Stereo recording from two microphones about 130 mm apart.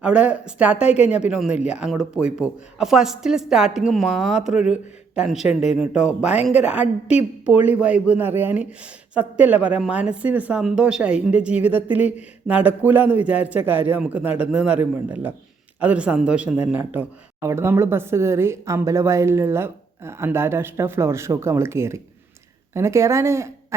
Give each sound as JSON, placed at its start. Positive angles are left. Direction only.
{"t": 0.0, "sound": "a woman's voice", "side_deg": -10}